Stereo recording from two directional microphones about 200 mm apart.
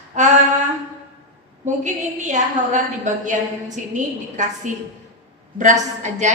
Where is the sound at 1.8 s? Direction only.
35° right (ahead or behind).